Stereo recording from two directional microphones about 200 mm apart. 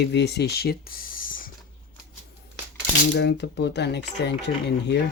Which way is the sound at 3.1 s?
60° left (ahead or behind).